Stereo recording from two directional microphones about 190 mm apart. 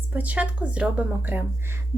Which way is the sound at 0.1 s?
10° right (ahead or behind).